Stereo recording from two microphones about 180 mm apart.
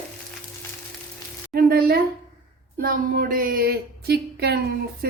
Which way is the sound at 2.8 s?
55° right (ahead or behind).